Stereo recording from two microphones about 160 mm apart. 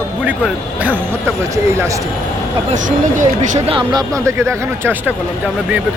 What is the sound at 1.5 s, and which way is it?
Speech, 20° right (ahead or behind).